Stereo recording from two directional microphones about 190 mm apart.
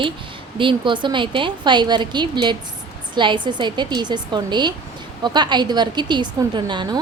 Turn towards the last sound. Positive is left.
turn(degrees=-25)  # may be behind; listen again after turning